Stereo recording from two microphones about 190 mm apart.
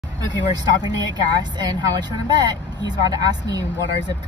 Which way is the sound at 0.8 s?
20° right (ahead or behind).